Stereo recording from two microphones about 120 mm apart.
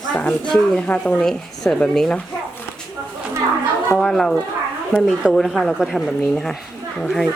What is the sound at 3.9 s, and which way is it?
A woman's voice, 5° left (ahead or behind).